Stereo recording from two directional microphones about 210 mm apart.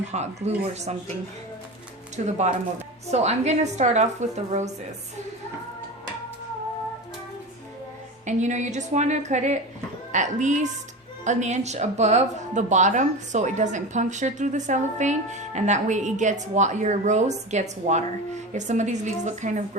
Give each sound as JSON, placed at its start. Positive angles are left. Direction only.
{"t": 0.1, "sound": "speech", "side_deg": -30}
{"t": 2.1, "sound": "speech", "side_deg": -35}
{"t": 8.2, "sound": "speech", "side_deg": -35}